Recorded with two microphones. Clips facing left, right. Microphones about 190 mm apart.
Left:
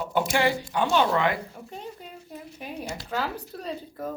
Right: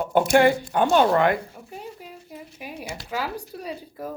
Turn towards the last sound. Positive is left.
turn(degrees=-10)  # may be behind; listen again after turning